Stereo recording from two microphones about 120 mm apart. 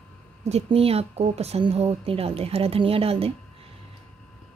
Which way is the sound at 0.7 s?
55° right (ahead or behind).